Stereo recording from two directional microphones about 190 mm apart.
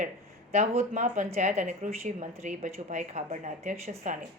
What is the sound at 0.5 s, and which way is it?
A woman's voice, 35° right (ahead or behind).